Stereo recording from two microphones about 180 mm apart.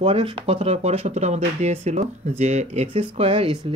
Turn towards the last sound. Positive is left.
turn(degrees=-30)  # may be behind; listen again after turning